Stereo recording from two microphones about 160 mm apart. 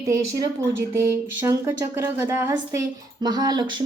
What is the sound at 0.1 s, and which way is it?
A woman's voice, 15° right (ahead or behind).